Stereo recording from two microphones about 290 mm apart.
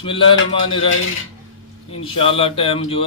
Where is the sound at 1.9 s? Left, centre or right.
Centre.